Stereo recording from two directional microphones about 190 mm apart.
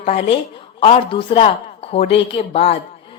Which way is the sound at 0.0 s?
35° left (ahead or behind).